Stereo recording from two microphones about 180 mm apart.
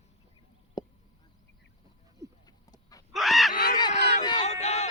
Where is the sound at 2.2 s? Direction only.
15° right (ahead or behind).